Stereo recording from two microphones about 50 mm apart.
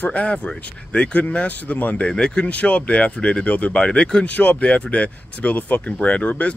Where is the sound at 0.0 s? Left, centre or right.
Left.